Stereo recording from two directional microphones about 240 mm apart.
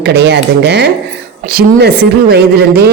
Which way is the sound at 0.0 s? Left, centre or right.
Right.